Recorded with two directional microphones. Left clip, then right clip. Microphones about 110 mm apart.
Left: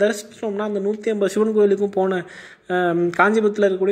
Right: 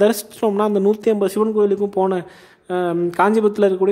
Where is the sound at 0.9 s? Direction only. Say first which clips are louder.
Right 5 dB; 55° right (ahead or behind).